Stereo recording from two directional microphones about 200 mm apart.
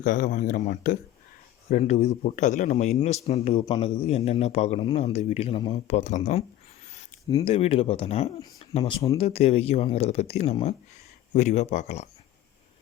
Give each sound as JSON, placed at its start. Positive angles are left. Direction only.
{"t": 0.0, "sound": "a man's voice", "side_deg": 40}
{"t": 7.4, "sound": "speech", "side_deg": 30}
{"t": 8.8, "sound": "speech", "side_deg": 20}
{"t": 9.1, "sound": "a man's voice", "side_deg": 30}